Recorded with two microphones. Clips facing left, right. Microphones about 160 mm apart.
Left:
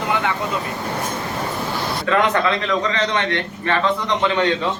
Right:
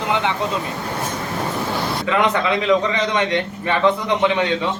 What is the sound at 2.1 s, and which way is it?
A man's voice, 15° right (ahead or behind).